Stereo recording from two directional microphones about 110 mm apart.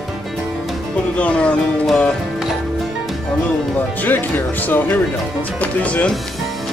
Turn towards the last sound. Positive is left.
turn(degrees=10)  # may be behind; listen again after turning